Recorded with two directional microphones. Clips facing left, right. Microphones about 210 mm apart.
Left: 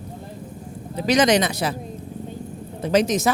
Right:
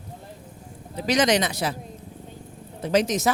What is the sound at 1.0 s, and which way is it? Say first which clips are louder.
Speech: left 3 dB; 60° left (ahead or behind).